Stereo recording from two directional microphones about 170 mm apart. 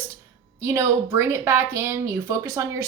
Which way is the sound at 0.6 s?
15° right (ahead or behind).